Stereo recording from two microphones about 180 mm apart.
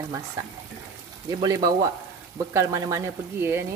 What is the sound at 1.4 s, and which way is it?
Speech, 20° right (ahead or behind).